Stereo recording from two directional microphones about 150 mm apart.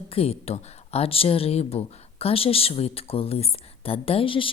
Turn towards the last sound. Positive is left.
turn(degrees=35)  # may be behind; listen again after turning